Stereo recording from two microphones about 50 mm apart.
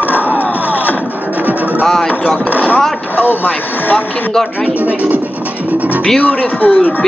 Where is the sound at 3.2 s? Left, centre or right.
Left.